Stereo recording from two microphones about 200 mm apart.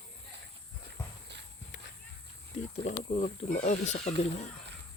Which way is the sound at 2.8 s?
35° left (ahead or behind).